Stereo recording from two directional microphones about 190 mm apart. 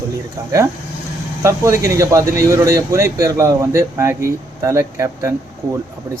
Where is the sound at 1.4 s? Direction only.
15° right (ahead or behind).